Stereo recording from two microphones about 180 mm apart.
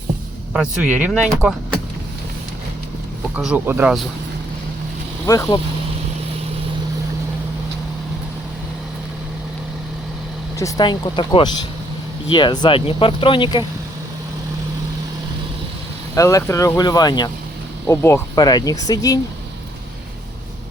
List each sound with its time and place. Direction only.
0.8 s speech: 10° right (ahead or behind)
3.3 s speech: 5° right (ahead or behind)
5.2 s speech: 15° left (ahead or behind)
10.6 s speech: 20° left (ahead or behind)
16.1 s speech: 15° left (ahead or behind)